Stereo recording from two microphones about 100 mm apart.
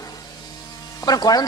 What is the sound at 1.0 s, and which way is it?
Speech, 40° left (ahead or behind).